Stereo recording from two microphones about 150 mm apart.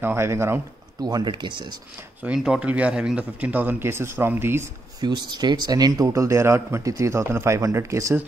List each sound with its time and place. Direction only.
0.0 s speech: 15° right (ahead or behind)
1.0 s speech: 30° right (ahead or behind)
2.2 s speech: 5° right (ahead or behind)
5.0 s speech: 30° right (ahead or behind)